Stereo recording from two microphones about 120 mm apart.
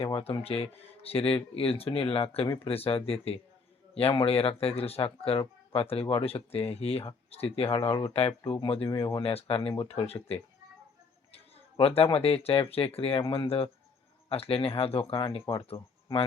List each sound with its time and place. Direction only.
0.0 s speech: 55° left (ahead or behind)
11.8 s speech: 55° left (ahead or behind)